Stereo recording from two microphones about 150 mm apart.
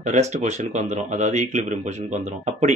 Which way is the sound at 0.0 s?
50° right (ahead or behind).